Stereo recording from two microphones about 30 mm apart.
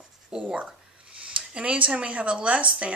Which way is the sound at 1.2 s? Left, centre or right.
Right.